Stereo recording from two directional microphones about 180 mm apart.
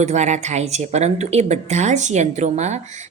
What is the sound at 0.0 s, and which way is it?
Speech, 40° right (ahead or behind).